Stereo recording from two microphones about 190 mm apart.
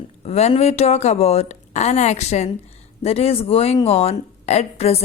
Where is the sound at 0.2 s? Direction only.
35° left (ahead or behind).